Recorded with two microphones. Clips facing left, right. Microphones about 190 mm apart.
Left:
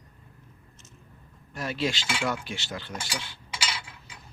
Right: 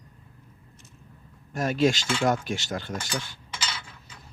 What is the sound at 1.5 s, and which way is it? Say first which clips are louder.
Cutlery: right 7 dB; 45° right (ahead or behind).